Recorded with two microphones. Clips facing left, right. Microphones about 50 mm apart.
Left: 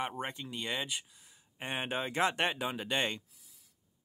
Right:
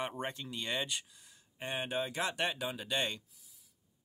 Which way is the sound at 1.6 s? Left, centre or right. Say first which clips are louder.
Left 1 dB; left.